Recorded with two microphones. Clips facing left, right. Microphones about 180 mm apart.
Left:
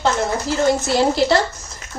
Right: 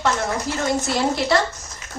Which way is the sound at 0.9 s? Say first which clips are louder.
Left 3 dB; 30° left (ahead or behind).